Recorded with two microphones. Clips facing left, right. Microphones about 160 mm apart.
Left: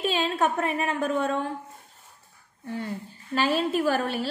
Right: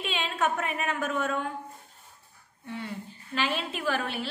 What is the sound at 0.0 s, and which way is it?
A woman's voice, 40° left (ahead or behind).